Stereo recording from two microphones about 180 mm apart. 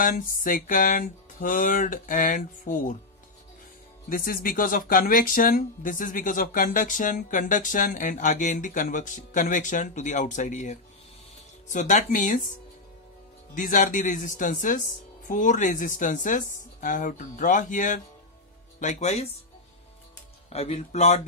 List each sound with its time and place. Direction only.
0.0 s speech: 50° left (ahead or behind)
4.1 s speech: 55° left (ahead or behind)
13.6 s speech: 45° left (ahead or behind)
20.4 s speech: 35° left (ahead or behind)